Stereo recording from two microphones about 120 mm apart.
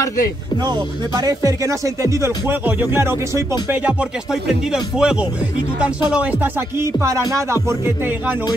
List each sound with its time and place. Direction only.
0.7 s speech: 35° right (ahead or behind)
3.6 s music: 15° right (ahead or behind)
6.8 s speech: 25° right (ahead or behind)